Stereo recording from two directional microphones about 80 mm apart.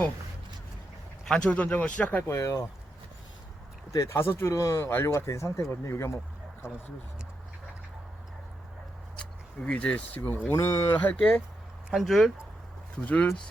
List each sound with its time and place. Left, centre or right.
1.3 s speech: centre
2.2 s speech: left
3.9 s speech: left
4.9 s speech: left
5.1 s speech: left
9.6 s speech: centre
10.5 s speech: left
10.9 s speech: centre
11.9 s speech: centre